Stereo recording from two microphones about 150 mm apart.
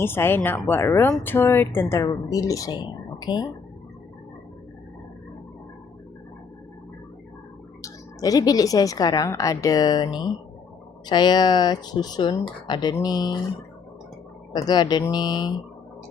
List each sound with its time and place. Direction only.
0.0 s speech: 15° left (ahead or behind)
7.8 s a woman's voice: 25° left (ahead or behind)
14.5 s a woman's voice: 25° left (ahead or behind)